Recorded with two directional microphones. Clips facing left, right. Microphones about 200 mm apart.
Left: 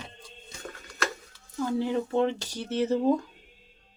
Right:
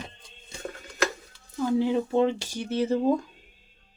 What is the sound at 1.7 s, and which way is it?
Speech, 15° right (ahead or behind).